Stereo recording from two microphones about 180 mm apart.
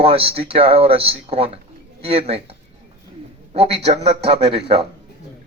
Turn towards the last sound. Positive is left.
turn(degrees=-30)  # may be behind; listen again after turning